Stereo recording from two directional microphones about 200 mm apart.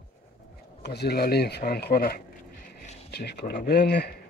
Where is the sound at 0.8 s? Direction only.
55° left (ahead or behind).